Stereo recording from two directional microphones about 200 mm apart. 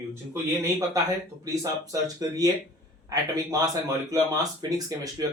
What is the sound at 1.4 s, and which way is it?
Speech, 15° right (ahead or behind).